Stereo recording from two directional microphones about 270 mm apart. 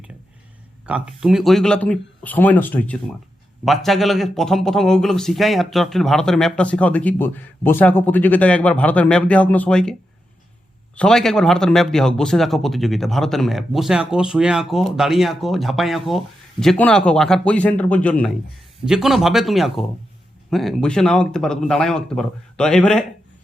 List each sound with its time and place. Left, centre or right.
0.9 s a man's voice: centre
10.9 s a man's voice: centre